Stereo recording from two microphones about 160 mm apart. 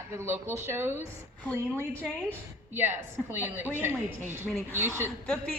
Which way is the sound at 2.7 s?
15° right (ahead or behind).